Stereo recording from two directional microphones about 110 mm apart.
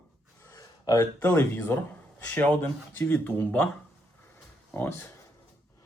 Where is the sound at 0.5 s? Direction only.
30° left (ahead or behind).